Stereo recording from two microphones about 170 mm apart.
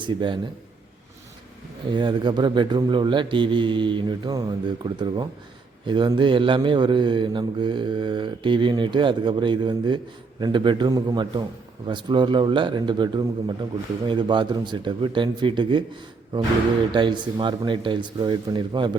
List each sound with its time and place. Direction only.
0.0 s speech: 30° right (ahead or behind)
1.9 s speech: 25° right (ahead or behind)
16.9 s speech: 25° right (ahead or behind)